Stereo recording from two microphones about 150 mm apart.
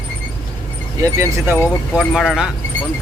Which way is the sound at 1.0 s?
20° right (ahead or behind).